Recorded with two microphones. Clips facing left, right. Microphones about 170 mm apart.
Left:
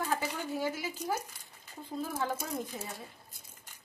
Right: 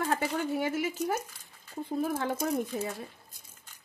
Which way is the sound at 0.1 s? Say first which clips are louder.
Right 4 dB; 60° right (ahead or behind).